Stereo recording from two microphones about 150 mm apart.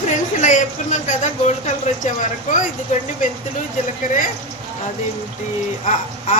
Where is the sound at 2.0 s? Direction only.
55° left (ahead or behind).